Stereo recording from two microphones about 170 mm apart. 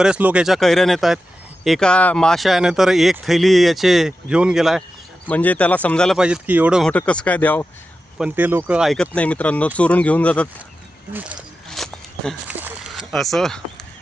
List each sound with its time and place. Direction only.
0.0 s speech: 5° right (ahead or behind)
5.3 s speech: 10° left (ahead or behind)
6.9 s speech: 5° left (ahead or behind)
8.2 s speech: 10° right (ahead or behind); by 10.5 s 5° left (ahead or behind)
11.1 s a sound: 5° right (ahead or behind)
12.5 s a sound: 10° right (ahead or behind)
12.9 s speech: centre (ahead or behind)